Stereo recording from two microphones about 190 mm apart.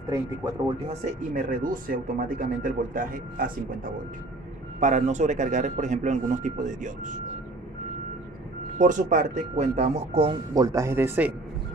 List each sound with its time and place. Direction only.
0.1 s speech: 20° right (ahead or behind)
0.8 s a man's voice: 40° right (ahead or behind)
8.7 s a man's voice: 40° right (ahead or behind)
10.5 s speech: 15° right (ahead or behind)